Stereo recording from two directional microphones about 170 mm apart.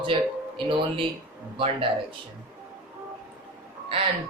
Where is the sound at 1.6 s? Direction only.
30° right (ahead or behind).